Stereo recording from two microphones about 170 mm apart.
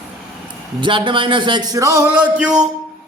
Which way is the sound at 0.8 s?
30° right (ahead or behind).